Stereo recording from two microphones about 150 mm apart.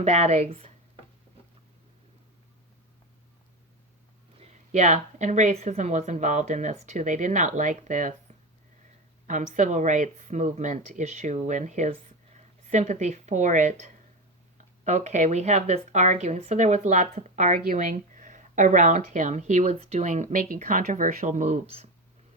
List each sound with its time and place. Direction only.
0.0 s speech: 45° right (ahead or behind)
4.4 s speech: 45° right (ahead or behind)
9.2 s speech: 55° right (ahead or behind)